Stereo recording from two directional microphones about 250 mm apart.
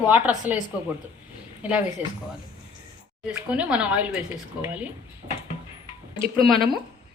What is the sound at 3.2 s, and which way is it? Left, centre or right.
A woman's voice, centre.